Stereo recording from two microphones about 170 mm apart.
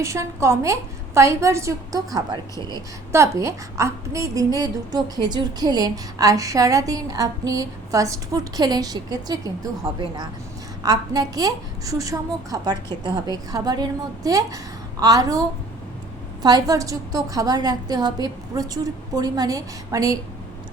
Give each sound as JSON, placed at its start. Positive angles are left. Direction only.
{"t": 0.0, "sound": "a woman's voice", "side_deg": -15}